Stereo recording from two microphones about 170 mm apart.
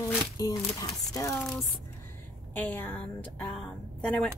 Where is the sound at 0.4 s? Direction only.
25° left (ahead or behind).